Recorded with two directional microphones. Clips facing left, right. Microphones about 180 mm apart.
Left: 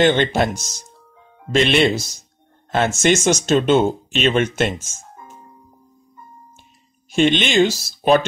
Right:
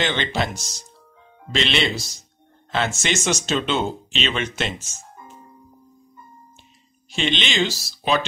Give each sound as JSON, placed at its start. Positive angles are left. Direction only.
{"t": 0.0, "sound": "speech", "side_deg": 50}
{"t": 4.6, "sound": "music", "side_deg": 50}
{"t": 7.1, "sound": "speech", "side_deg": 50}